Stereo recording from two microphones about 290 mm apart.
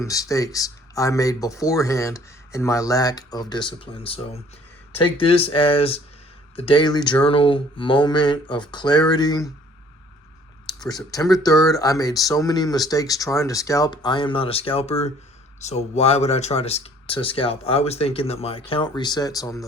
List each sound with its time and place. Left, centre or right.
0.0 s speech: centre
10.7 s speech: centre